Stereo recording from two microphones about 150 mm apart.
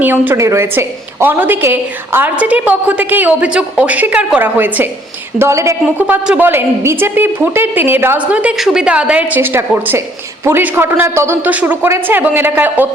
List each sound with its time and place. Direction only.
0.0 s a woman's voice: 10° right (ahead or behind)
5.8 s a woman's voice: 5° right (ahead or behind)